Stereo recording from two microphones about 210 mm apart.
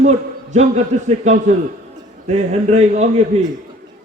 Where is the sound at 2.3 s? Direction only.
30° right (ahead or behind).